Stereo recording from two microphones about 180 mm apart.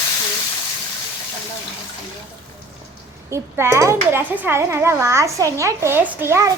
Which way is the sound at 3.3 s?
15° right (ahead or behind).